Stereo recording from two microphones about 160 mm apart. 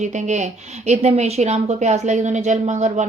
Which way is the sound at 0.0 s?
50° right (ahead or behind).